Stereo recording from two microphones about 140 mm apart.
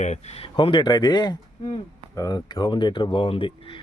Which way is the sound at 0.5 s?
35° left (ahead or behind).